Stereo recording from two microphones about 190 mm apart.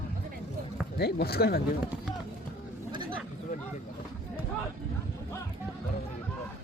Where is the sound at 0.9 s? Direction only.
55° left (ahead or behind).